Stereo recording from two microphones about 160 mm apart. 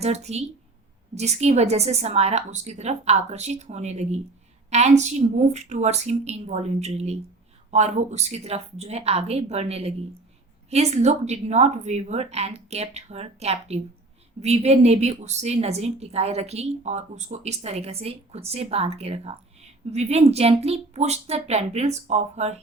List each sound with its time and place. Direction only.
0.0 s a woman's voice: 40° right (ahead or behind)